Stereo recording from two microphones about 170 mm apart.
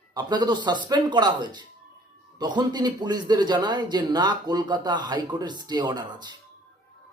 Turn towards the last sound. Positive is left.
turn(degrees=-25)  # may be behind; listen again after turning